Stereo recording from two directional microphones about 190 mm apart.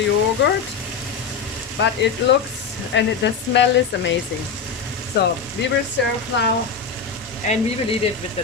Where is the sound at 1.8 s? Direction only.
65° left (ahead or behind).